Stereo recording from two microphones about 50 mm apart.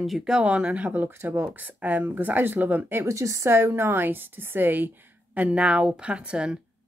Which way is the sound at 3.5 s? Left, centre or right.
Right.